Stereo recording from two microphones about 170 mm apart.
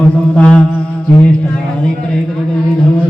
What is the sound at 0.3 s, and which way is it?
Mantra, 5° left (ahead or behind).